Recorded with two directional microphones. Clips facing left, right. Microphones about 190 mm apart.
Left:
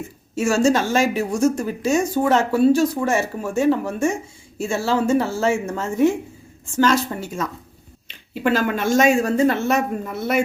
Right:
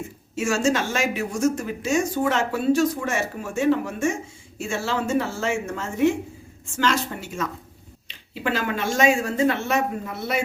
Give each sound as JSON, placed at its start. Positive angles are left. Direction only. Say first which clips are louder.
{"t": 0.3, "sound": "speech", "louder": "left 5 dB", "side_deg": 35}